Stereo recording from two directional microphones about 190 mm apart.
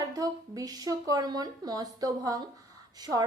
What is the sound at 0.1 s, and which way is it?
A woman's voice, 20° right (ahead or behind).